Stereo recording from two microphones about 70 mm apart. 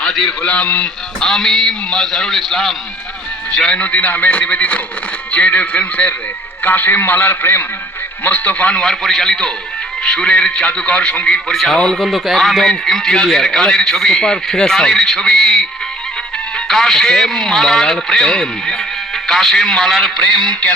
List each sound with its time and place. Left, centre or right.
0.0 s a man's voice: centre
1.3 s a man's voice: centre
3.5 s a man's voice: centre
8.8 s a man's voice: centre
20.5 s a man's voice: centre